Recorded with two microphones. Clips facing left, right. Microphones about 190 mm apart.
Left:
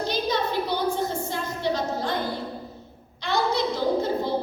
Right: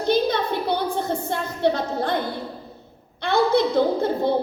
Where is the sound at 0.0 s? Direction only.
55° right (ahead or behind).